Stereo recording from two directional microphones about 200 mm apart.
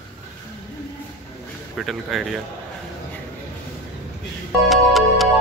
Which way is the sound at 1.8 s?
Centre (ahead or behind).